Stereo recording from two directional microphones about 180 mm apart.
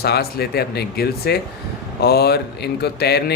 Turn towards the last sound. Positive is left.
turn(degrees=65)  # may be behind; listen again after turning